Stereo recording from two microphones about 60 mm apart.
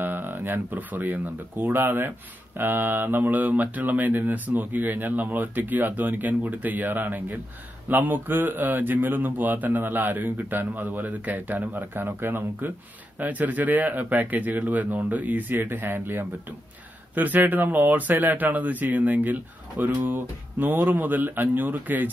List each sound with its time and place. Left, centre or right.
0.0 s speech: right